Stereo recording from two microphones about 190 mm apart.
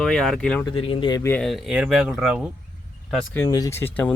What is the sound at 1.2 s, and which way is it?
Speech, 10° left (ahead or behind).